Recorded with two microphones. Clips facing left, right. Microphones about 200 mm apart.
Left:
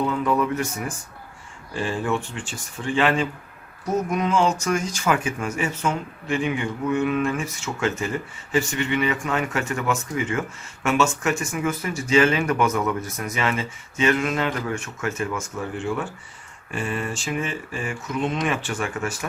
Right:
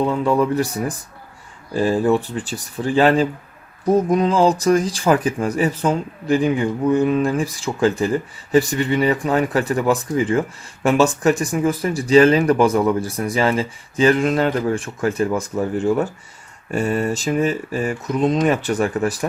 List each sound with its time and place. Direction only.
0.0 s speech: 30° right (ahead or behind)